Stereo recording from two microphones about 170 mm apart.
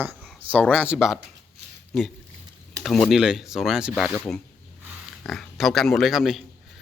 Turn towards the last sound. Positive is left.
turn(degrees=0)  # may be behind; listen again after turning